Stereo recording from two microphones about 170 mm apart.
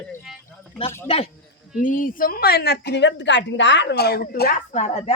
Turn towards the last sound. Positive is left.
turn(degrees=40)  # may be behind; listen again after turning